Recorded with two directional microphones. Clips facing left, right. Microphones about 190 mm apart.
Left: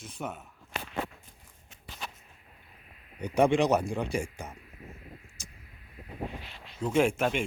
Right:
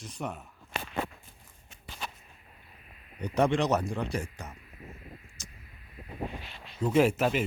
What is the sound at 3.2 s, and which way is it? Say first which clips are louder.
Speech: left 2 dB; 10° left (ahead or behind).